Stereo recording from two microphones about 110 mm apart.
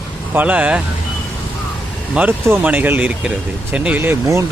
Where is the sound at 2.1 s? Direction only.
15° right (ahead or behind).